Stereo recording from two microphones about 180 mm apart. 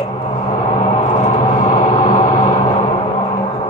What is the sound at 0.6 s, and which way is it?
Gong, 40° left (ahead or behind).